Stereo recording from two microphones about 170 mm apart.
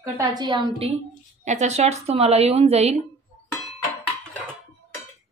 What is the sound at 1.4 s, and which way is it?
Speech, 45° right (ahead or behind).